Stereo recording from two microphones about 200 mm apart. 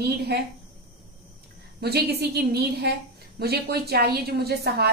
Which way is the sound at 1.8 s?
50° right (ahead or behind).